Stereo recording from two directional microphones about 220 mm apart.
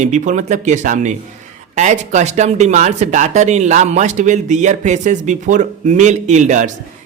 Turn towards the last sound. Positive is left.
turn(degrees=-35)  # may be behind; listen again after turning